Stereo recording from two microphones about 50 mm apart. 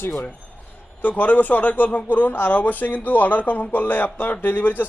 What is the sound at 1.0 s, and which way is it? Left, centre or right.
Speech, left.